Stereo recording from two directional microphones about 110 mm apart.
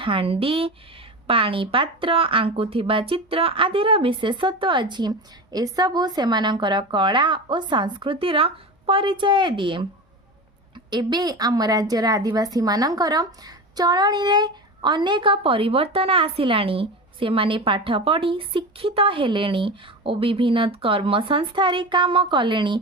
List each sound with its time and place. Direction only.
0.0 s a woman's voice: 55° right (ahead or behind)
10.9 s a woman's voice: 40° right (ahead or behind)